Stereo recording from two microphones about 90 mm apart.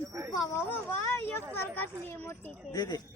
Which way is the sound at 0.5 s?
25° left (ahead or behind).